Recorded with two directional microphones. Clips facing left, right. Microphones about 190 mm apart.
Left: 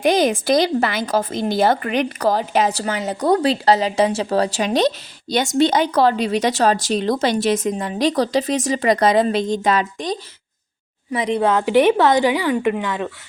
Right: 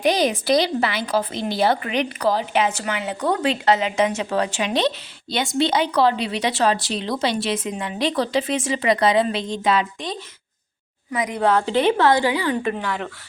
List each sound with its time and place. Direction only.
0.0 s a woman's voice: 50° left (ahead or behind)
11.1 s speech: 30° left (ahead or behind)
11.3 s a woman's voice: 20° left (ahead or behind)